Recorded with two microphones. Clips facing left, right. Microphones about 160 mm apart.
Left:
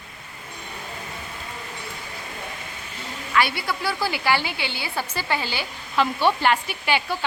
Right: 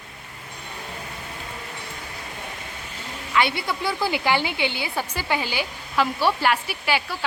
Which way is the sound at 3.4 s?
20° right (ahead or behind).